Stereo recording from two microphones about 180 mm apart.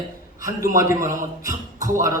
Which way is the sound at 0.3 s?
15° right (ahead or behind).